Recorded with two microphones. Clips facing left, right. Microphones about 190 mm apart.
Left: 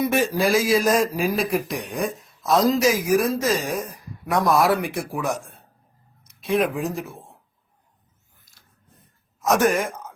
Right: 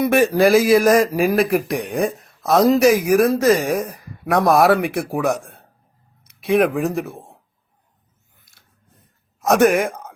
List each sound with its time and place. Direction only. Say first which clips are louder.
0.0 s speech: right 6 dB; 60° right (ahead or behind)
9.5 s speech: right 5 dB; 65° right (ahead or behind)